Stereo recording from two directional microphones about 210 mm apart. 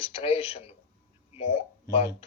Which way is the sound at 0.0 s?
25° left (ahead or behind).